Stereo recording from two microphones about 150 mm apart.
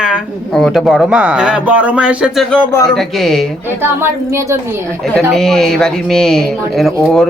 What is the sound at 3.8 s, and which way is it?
Speech, 15° right (ahead or behind).